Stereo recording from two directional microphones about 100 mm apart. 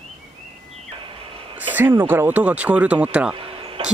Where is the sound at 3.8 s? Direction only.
65° right (ahead or behind).